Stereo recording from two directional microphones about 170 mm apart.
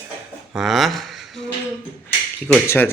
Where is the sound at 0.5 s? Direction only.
Centre (ahead or behind).